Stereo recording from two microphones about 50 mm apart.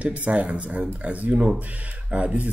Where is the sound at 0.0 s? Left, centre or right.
Right.